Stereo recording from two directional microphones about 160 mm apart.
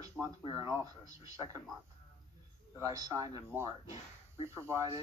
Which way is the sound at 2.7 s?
20° right (ahead or behind).